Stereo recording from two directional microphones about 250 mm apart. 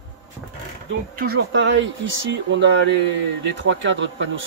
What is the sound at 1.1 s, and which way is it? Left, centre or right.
Speech, right.